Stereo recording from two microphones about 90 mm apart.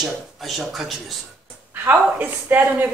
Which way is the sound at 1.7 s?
20° right (ahead or behind).